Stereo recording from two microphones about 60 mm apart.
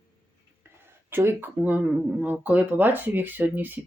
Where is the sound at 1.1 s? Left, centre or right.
Right.